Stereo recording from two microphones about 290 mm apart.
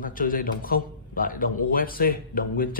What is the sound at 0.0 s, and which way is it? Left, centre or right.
A man's voice, left.